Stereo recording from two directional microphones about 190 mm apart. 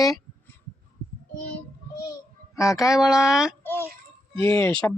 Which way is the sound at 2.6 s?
15° left (ahead or behind).